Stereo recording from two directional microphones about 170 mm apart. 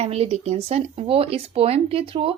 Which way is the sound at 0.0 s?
35° right (ahead or behind).